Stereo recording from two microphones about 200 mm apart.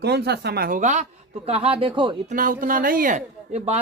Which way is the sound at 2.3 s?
45° right (ahead or behind).